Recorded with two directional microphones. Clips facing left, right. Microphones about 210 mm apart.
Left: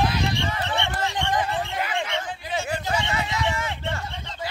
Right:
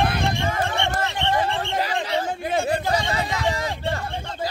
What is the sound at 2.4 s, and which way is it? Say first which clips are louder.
Chatter: right 6 dB; 55° right (ahead or behind).